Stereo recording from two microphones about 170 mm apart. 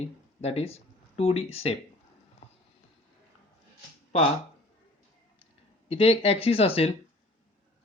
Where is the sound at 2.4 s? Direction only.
40° left (ahead or behind).